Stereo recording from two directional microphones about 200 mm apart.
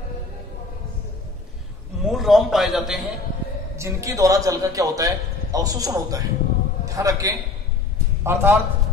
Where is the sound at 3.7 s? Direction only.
15° right (ahead or behind).